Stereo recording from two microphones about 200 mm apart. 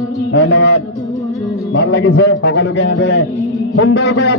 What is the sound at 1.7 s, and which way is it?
A man's voice, 60° left (ahead or behind).